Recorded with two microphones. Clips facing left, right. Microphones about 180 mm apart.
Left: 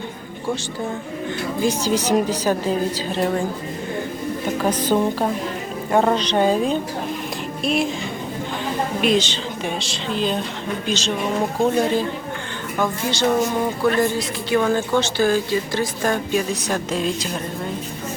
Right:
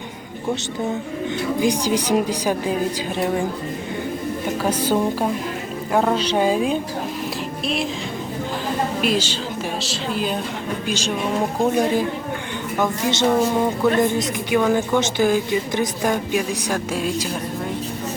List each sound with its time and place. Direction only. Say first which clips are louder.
1.6 s speech: left 1 dB; 10° right (ahead or behind)
4.6 s speech: left 1 dB; 10° right (ahead or behind)
9.0 s a woman's voice: left 2 dB; 5° right (ahead or behind)